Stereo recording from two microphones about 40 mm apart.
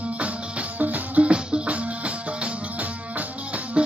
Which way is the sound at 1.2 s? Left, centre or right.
Right.